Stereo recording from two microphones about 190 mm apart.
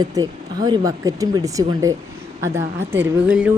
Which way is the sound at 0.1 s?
20° right (ahead or behind).